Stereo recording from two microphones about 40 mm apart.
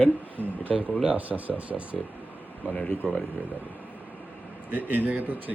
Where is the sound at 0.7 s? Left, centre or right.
Centre.